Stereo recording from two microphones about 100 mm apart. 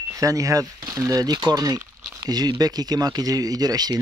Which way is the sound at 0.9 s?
35° right (ahead or behind).